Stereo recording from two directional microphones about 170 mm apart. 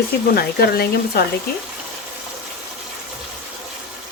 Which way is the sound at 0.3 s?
65° left (ahead or behind).